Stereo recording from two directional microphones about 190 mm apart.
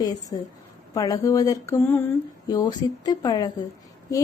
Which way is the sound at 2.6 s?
20° left (ahead or behind).